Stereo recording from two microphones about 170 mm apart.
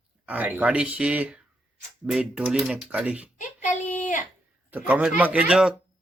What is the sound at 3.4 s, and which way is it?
Child singing, 50° left (ahead or behind).